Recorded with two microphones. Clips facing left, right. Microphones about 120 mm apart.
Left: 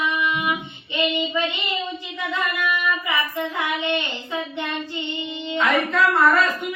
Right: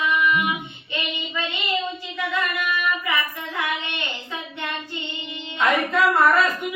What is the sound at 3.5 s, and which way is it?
Child singing, 20° left (ahead or behind).